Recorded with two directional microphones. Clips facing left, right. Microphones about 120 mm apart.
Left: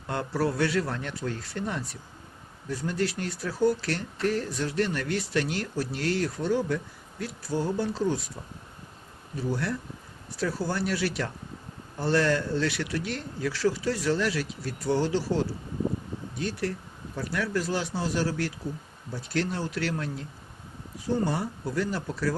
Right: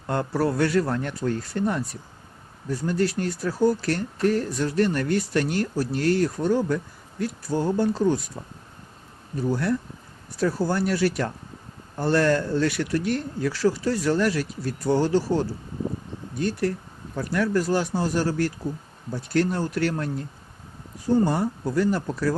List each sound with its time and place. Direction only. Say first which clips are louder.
0.1 s speech: right 4 dB; 45° right (ahead or behind)
9.5 s speech: right 6 dB; 45° right (ahead or behind)
16.4 s speech: right 6 dB; 45° right (ahead or behind)
21.2 s speech: right 5 dB; 45° right (ahead or behind)